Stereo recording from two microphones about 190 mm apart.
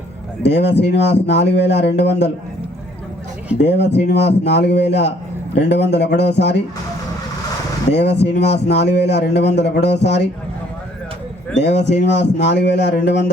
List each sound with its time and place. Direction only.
0.4 s a man's voice: 65° left (ahead or behind)
3.6 s a man's voice: 65° left (ahead or behind)
7.9 s a man's voice: 65° left (ahead or behind)
11.5 s a man's voice: 65° left (ahead or behind)